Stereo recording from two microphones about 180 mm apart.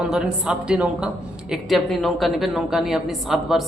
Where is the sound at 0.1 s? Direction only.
5° right (ahead or behind).